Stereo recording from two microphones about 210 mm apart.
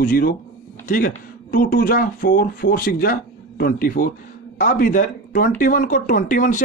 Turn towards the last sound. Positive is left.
turn(degrees=40)  # may be behind; listen again after turning